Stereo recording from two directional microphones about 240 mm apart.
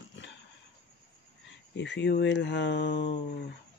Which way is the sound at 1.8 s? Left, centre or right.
Left.